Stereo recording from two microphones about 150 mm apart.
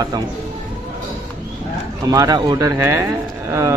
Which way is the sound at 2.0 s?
25° right (ahead or behind).